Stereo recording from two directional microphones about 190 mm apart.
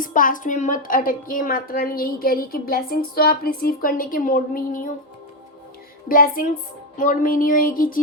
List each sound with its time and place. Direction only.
0.0 s a woman's voice: 45° left (ahead or behind)
6.1 s a woman's voice: 50° left (ahead or behind)